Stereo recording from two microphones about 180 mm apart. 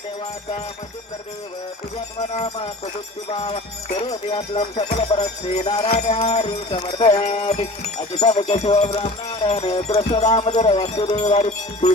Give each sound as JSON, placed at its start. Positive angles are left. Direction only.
{"t": 2.3, "sound": "speech", "side_deg": 30}
{"t": 3.2, "sound": "wind chime", "side_deg": 30}
{"t": 10.8, "sound": "wind chime", "side_deg": 35}